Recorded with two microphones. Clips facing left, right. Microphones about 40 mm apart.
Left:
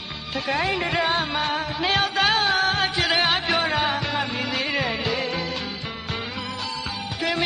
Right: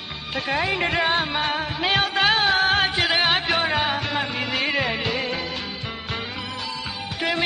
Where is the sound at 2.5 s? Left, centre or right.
Right.